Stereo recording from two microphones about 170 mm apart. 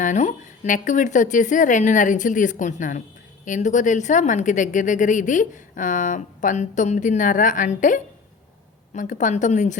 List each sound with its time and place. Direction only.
0.0 s speech: 45° left (ahead or behind)